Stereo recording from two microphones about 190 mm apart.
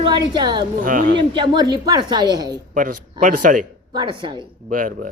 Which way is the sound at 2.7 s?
45° right (ahead or behind).